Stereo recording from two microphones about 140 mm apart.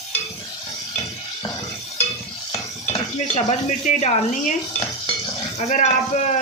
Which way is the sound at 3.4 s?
55° left (ahead or behind).